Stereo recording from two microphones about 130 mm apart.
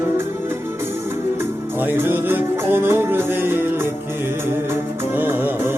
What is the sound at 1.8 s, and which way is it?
Music, 15° right (ahead or behind).